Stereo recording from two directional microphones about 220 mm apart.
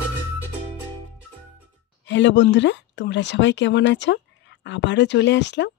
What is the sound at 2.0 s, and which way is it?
A woman's voice, 55° left (ahead or behind).